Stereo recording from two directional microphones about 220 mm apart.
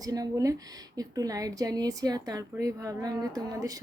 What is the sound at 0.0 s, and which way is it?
A woman's voice, 15° right (ahead or behind).